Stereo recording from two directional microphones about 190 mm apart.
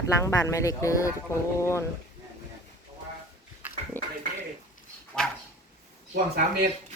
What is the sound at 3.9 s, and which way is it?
Speech, 10° left (ahead or behind).